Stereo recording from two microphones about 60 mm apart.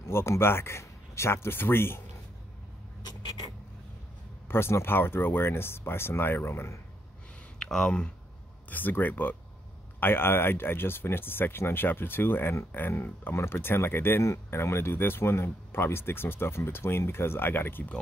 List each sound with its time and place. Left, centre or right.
0.1 s speech: left
4.5 s speech: left
7.5 s speech: centre
8.6 s speech: left